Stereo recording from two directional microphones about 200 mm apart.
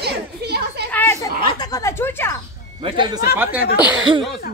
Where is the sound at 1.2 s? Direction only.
20° left (ahead or behind).